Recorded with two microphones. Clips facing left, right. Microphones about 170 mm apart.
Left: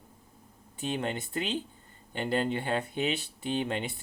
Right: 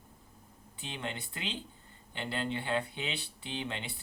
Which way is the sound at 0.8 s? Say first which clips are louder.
Left 8 dB; 45° left (ahead or behind).